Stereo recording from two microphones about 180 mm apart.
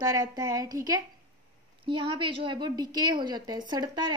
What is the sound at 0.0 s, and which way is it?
A woman's voice, 20° right (ahead or behind).